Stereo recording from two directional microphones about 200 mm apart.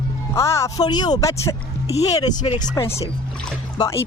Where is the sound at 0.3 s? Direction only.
15° left (ahead or behind).